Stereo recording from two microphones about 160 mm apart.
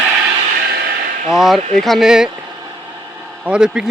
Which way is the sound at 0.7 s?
80° right.